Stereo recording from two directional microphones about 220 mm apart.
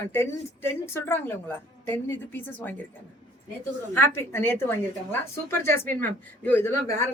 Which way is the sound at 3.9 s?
10° left (ahead or behind).